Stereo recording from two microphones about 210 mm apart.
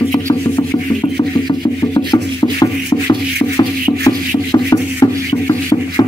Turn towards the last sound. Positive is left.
turn(degrees=20)  # may be behind; listen again after turning